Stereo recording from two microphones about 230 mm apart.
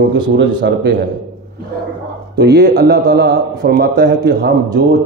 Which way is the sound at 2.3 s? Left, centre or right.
Right.